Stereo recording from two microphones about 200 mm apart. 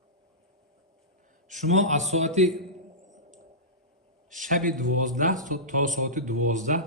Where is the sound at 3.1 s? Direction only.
35° right (ahead or behind).